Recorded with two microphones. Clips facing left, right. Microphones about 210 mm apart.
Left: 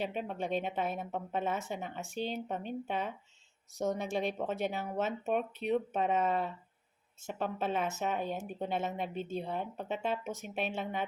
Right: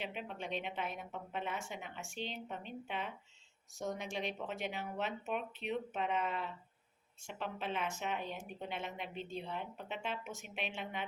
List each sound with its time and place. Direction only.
0.0 s speech: 40° left (ahead or behind)